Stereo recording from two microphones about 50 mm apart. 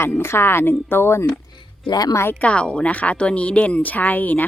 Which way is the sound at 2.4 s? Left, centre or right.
Left.